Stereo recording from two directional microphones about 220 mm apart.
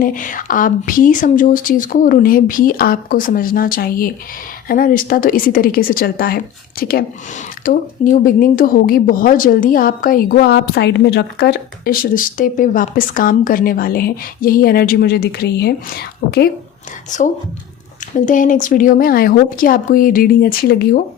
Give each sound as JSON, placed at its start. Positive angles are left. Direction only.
{"t": 0.0, "sound": "speech", "side_deg": 35}
{"t": 17.1, "sound": "speech", "side_deg": 35}
{"t": 18.3, "sound": "speech", "side_deg": 35}